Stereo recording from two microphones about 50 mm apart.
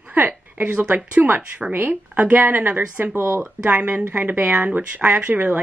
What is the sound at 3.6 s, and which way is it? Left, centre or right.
Speech, right.